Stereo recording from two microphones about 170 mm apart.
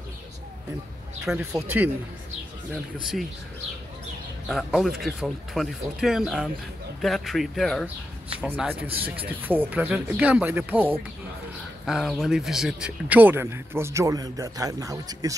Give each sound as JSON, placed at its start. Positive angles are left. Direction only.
{"t": 1.2, "sound": "speech", "side_deg": -15}
{"t": 4.5, "sound": "speech", "side_deg": 0}
{"t": 8.4, "sound": "speech", "side_deg": -10}
{"t": 11.8, "sound": "speech", "side_deg": 0}